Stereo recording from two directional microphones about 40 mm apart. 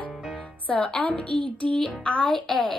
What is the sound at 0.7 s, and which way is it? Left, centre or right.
Speech, centre.